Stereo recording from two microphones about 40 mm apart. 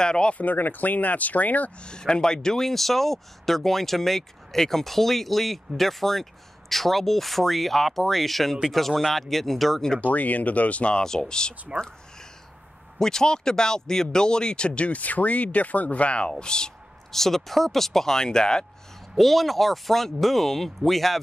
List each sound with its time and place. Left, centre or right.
0.0 s speech: left
0.3 s speech: left
1.8 s speech: left; by 9.8 s centre
10.0 s speech: left
11.1 s speech: centre
13.0 s speech: centre
17.1 s speech: centre
19.1 s speech: centre